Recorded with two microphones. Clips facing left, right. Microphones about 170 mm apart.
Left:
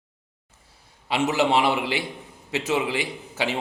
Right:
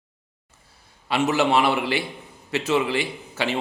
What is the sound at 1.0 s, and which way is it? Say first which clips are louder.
A man's voice: right 1 dB; 15° left (ahead or behind).